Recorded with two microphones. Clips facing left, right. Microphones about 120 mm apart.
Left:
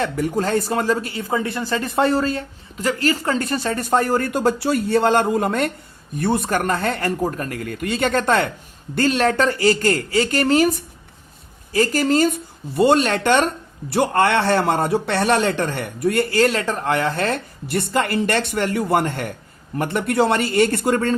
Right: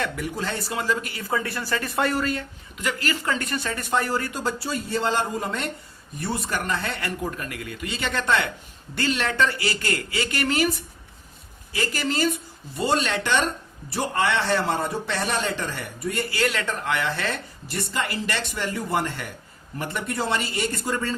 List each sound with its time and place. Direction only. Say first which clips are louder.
0.0 s speech: left 7 dB; 40° left (ahead or behind)
12.7 s speech: left 8 dB; 60° left (ahead or behind)
13.9 s speech: left 7 dB; 65° left (ahead or behind)
16.3 s speech: left 7 dB; 40° left (ahead or behind); by 21.2 s 55° left (ahead or behind)